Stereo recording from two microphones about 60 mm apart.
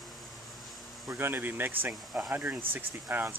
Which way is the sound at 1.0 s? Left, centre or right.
Right.